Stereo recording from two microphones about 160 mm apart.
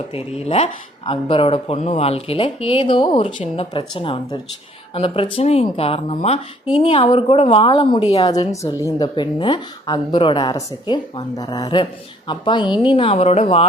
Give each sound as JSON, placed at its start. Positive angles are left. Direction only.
{"t": 0.1, "sound": "speech", "side_deg": 40}